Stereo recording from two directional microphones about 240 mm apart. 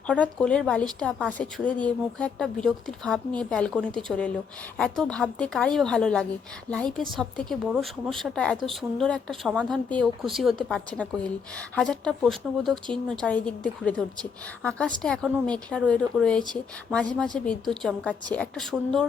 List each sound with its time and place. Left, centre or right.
0.1 s a woman's voice: centre